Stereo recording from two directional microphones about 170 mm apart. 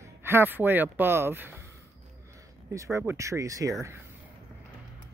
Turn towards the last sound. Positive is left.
turn(degrees=-20)  # may be behind; listen again after turning